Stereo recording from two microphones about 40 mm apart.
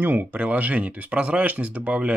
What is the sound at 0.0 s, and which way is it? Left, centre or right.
Speech, right.